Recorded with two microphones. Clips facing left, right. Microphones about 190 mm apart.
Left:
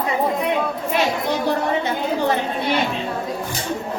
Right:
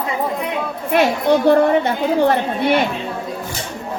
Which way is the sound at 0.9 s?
60° right (ahead or behind).